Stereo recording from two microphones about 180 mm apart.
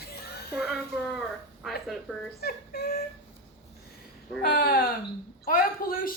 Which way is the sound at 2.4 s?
60° left (ahead or behind).